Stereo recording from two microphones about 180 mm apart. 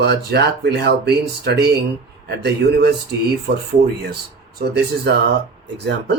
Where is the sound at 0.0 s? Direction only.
65° right (ahead or behind).